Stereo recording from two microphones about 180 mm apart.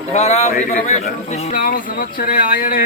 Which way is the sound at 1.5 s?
50° left (ahead or behind).